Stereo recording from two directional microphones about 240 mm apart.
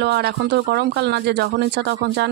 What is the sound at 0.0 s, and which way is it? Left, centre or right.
Speech, right.